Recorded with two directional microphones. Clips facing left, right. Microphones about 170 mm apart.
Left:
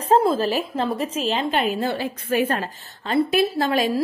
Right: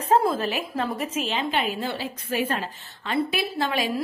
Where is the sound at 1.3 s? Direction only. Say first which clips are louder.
Left 5 dB; 45° left (ahead or behind).